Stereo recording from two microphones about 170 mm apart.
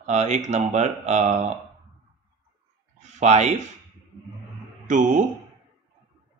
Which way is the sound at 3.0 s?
45° right (ahead or behind).